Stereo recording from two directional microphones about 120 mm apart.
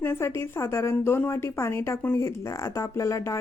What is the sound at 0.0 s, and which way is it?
A woman's voice, 20° left (ahead or behind).